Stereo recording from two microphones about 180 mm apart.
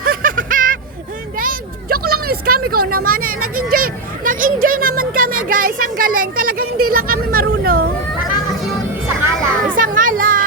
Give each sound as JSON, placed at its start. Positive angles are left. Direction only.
{"t": 0.0, "sound": "a sound", "side_deg": -50}
{"t": 1.4, "sound": "speech", "side_deg": -55}
{"t": 9.7, "sound": "music", "side_deg": -50}